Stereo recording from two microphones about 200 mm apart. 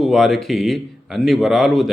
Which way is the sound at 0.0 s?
Centre (ahead or behind).